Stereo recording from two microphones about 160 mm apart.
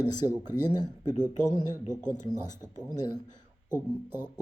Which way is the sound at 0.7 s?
25° left (ahead or behind).